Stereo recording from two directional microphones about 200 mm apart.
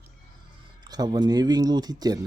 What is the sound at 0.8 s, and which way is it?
Speech, 20° right (ahead or behind).